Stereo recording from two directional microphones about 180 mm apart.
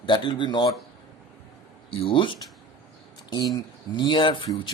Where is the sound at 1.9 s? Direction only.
30° left (ahead or behind).